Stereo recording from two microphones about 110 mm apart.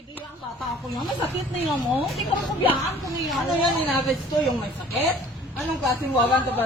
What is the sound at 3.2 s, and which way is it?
A woman's voice, centre (ahead or behind).